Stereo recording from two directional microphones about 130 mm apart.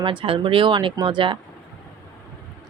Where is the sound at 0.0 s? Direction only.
40° right (ahead or behind).